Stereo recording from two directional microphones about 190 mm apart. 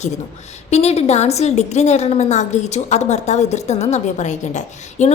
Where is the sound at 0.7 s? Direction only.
35° left (ahead or behind).